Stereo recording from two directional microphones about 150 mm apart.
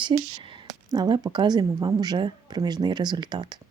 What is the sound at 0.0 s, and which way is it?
Speech, 30° right (ahead or behind).